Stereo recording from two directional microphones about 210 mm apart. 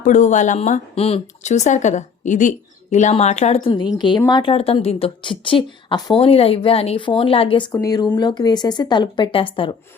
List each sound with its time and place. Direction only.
0.0 s a woman's voice: 35° left (ahead or behind)